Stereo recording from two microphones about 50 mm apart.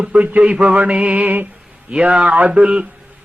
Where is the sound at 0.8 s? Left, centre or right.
Right.